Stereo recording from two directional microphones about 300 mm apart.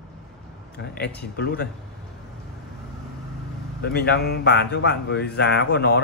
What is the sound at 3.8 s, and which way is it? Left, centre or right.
Speech, left.